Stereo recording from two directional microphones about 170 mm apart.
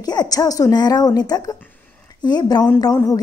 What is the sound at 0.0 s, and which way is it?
A woman's voice, 25° left (ahead or behind).